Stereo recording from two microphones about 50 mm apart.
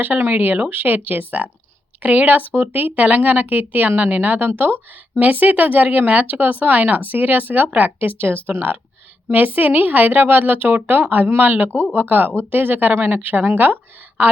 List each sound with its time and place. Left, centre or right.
0.0 s speech: right
5.1 s speech: right